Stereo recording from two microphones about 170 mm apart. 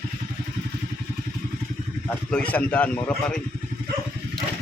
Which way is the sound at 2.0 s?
10° left (ahead or behind).